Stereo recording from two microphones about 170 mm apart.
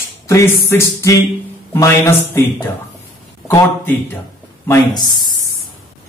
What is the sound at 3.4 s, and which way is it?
Speech, 15° left (ahead or behind).